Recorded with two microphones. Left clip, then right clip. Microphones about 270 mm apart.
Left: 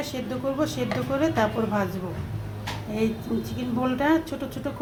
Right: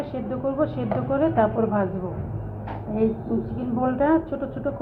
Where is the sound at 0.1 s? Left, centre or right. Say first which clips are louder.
Right 2 dB; left.